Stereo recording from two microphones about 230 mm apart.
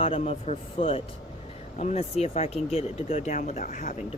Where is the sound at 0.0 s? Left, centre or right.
Left.